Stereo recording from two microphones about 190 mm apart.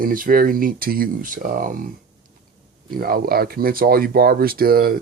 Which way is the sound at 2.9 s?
50° right (ahead or behind).